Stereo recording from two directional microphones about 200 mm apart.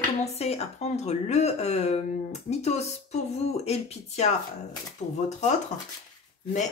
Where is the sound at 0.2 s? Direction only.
30° left (ahead or behind).